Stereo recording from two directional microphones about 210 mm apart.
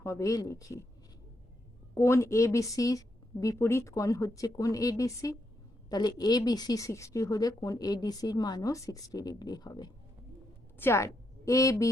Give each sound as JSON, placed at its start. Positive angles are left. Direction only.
{"t": 0.0, "sound": "speech", "side_deg": 15}
{"t": 2.0, "sound": "a woman's voice", "side_deg": 10}